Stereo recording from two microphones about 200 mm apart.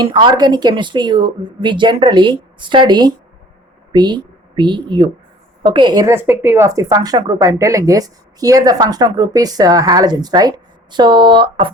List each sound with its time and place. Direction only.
0.0 s a woman's voice: 25° right (ahead or behind)